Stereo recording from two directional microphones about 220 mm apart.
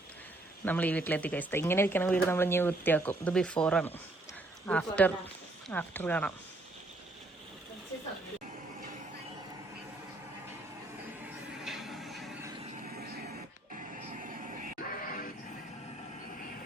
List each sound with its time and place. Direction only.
0.6 s speech: 10° left (ahead or behind)
11.2 s a sound: centre (ahead or behind)
12.9 s dog: 45° right (ahead or behind)
13.9 s vehicle: 40° right (ahead or behind)
14.8 s music: 40° left (ahead or behind)